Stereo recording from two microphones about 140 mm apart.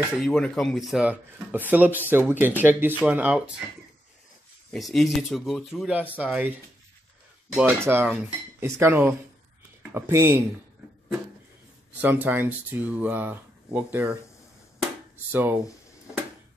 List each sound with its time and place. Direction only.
0.2 s speech: 5° left (ahead or behind)
4.6 s speech: centre (ahead or behind)
7.5 s speech: 15° right (ahead or behind)
12.0 s speech: 15° right (ahead or behind)
15.3 s speech: 15° right (ahead or behind)